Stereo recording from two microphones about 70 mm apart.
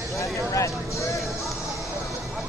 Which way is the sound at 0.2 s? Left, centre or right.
Left.